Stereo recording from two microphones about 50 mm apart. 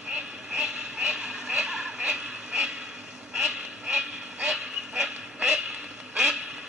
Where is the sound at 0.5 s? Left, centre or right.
Centre.